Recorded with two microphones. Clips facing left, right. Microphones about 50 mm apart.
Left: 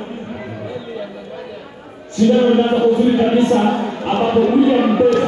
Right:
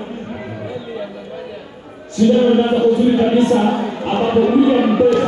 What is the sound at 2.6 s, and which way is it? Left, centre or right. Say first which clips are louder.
Speech: even; centre.